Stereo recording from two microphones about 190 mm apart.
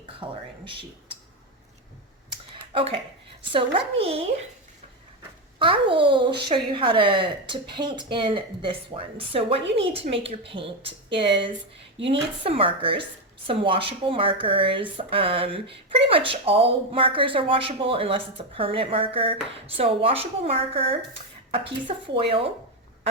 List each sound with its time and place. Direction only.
0.2 s speech: 25° right (ahead or behind)
2.7 s a woman's voice: 30° right (ahead or behind)
5.5 s a woman's voice: 25° right (ahead or behind)
12.0 s a woman's voice: 30° right (ahead or behind)